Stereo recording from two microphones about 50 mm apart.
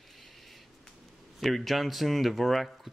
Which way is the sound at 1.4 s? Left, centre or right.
Centre.